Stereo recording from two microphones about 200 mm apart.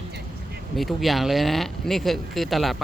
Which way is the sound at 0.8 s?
Centre (ahead or behind).